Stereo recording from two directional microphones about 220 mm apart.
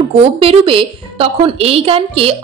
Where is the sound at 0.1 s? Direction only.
25° right (ahead or behind).